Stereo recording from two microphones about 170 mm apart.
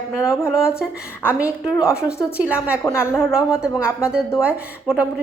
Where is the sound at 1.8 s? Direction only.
15° left (ahead or behind).